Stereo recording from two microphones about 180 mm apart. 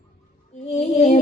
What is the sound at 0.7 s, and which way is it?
Music, 35° left (ahead or behind).